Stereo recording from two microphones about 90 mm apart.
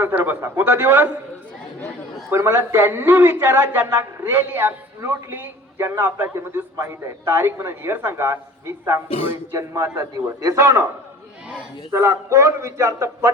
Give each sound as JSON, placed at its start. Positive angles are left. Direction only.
{"t": 0.0, "sound": "a man's voice", "side_deg": -20}
{"t": 2.3, "sound": "a man's voice", "side_deg": -30}
{"t": 11.9, "sound": "a man's voice", "side_deg": -30}